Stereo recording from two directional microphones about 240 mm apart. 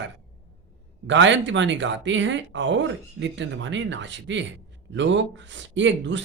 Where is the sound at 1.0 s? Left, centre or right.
Right.